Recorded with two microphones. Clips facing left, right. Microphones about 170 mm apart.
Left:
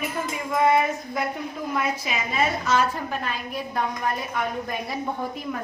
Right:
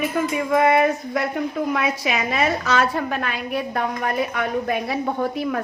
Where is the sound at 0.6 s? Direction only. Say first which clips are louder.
Even; 75° right (ahead or behind).